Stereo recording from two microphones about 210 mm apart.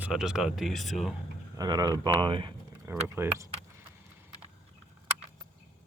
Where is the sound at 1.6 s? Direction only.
20° right (ahead or behind).